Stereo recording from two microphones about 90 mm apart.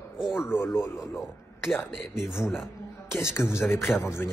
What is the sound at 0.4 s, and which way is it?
Speech, 30° left (ahead or behind).